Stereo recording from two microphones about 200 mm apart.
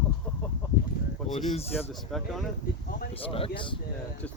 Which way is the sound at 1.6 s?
30° left (ahead or behind).